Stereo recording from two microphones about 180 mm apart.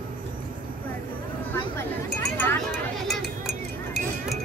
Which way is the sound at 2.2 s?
5° left (ahead or behind).